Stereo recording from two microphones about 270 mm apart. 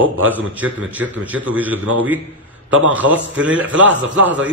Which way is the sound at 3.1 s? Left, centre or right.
Right.